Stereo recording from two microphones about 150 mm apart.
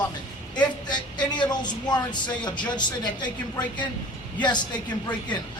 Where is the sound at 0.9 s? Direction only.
30° left (ahead or behind).